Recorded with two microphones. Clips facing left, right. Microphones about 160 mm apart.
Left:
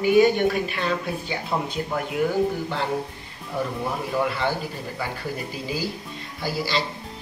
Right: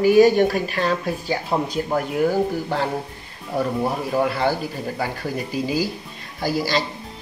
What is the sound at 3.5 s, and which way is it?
Speech, 40° right (ahead or behind).